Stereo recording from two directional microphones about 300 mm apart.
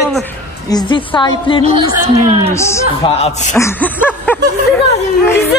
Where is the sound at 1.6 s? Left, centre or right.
Centre.